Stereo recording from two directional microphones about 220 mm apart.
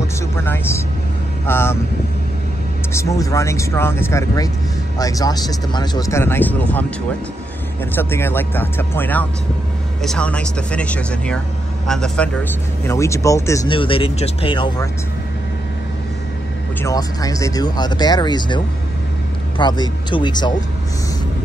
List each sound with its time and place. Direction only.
0.4 s speech: 10° left (ahead or behind)
2.9 s speech: 15° left (ahead or behind)
7.9 s speech: 10° left (ahead or behind)
12.8 s speech: 15° left (ahead or behind)
16.8 s speech: 15° left (ahead or behind)
19.6 s speech: 20° left (ahead or behind)